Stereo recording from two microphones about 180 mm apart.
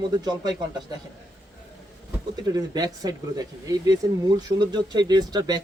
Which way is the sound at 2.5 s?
20° right (ahead or behind).